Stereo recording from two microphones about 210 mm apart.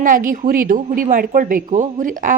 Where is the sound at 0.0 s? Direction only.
40° right (ahead or behind).